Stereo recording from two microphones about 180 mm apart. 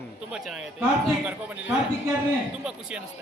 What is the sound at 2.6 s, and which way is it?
Speech, 5° right (ahead or behind).